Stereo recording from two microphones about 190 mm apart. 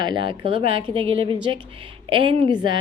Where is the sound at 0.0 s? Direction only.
25° right (ahead or behind).